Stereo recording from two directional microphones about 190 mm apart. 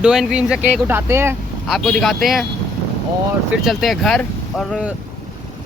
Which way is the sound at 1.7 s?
Centre (ahead or behind).